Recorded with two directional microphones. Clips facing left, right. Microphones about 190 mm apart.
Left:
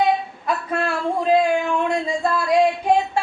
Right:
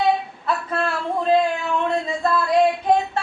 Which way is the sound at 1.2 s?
10° left (ahead or behind).